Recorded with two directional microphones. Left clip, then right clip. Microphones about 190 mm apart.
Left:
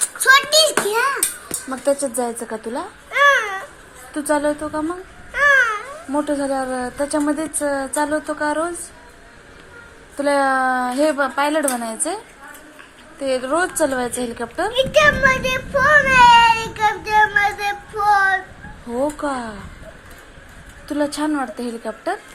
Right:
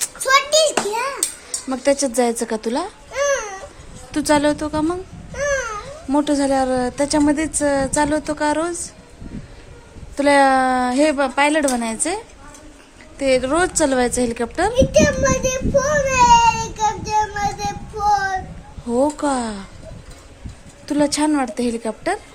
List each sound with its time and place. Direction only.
0.2 s a sound: 15° right (ahead or behind)
1.7 s a woman's voice: 45° right (ahead or behind)
3.1 s baby cry: 25° right (ahead or behind)
4.1 s a woman's voice: 50° right (ahead or behind)
5.3 s babbling: 20° right (ahead or behind)
6.1 s a woman's voice: 55° right (ahead or behind)
10.2 s a woman's voice: 50° right (ahead or behind)
14.7 s child singing: 25° right (ahead or behind)
18.9 s a woman's voice: 55° right (ahead or behind)
20.8 s a woman's voice: 55° right (ahead or behind)